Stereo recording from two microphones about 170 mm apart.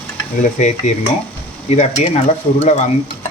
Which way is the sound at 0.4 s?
45° left (ahead or behind).